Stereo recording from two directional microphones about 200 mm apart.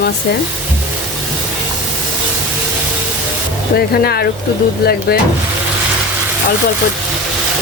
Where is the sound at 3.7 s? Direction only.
50° left (ahead or behind).